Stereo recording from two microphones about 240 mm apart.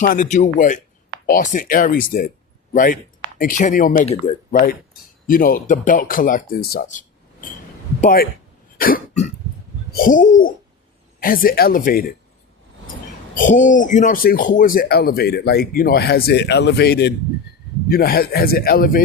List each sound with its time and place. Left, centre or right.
0.0 s speech: left
5.3 s speech: left
8.0 s speech: left
8.8 s cough: left
9.9 s speech: left
13.3 s speech: left